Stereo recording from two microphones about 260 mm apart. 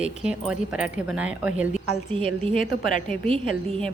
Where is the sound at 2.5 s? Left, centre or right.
Left.